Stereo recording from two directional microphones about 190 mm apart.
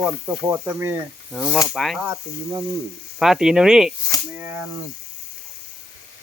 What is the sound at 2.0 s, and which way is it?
Sizzle, 20° right (ahead or behind).